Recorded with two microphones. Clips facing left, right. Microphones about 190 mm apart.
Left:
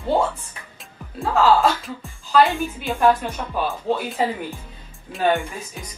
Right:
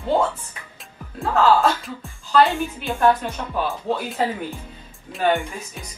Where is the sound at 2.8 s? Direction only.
15° left (ahead or behind).